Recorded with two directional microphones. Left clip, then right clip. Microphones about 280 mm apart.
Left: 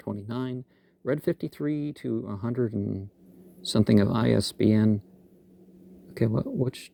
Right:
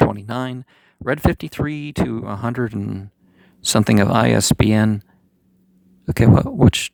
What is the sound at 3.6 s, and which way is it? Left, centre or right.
Speech, right.